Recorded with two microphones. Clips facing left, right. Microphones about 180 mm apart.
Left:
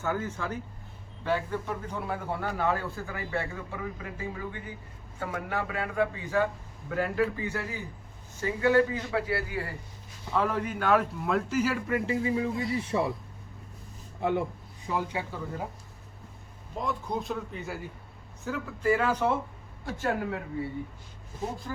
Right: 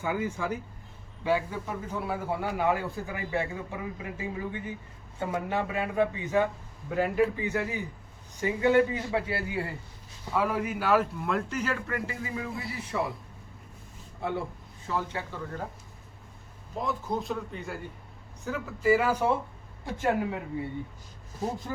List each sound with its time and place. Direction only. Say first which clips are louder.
0.0 s a man's voice: right 1 dB; 10° right (ahead or behind)
10.3 s a man's voice: even; 10° right (ahead or behind)
11.9 s speech: left 6 dB; 25° left (ahead or behind)
14.2 s speech: left 4 dB; 20° left (ahead or behind)
16.7 s a man's voice: right 1 dB; centre (ahead or behind)
19.8 s a man's voice: right 2 dB; 20° right (ahead or behind)